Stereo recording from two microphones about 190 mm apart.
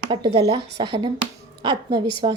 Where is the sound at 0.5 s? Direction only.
25° right (ahead or behind).